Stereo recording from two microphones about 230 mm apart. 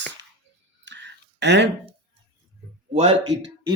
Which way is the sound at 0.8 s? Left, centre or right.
Right.